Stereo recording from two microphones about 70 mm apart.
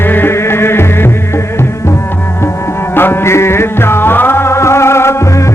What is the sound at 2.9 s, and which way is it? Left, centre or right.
Music, left.